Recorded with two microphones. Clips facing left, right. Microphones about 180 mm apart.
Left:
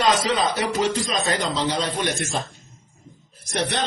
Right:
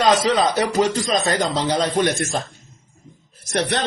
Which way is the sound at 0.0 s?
40° right (ahead or behind).